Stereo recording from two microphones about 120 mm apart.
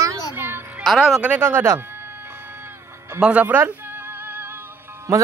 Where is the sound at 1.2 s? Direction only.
15° right (ahead or behind).